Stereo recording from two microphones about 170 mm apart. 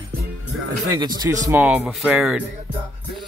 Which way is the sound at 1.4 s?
10° right (ahead or behind).